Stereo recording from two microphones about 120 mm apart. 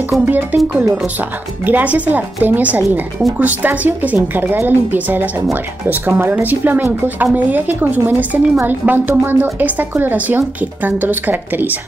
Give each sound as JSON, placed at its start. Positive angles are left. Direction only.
{"t": 0.2, "sound": "a woman's voice", "side_deg": -15}
{"t": 1.7, "sound": "a woman's voice", "side_deg": -15}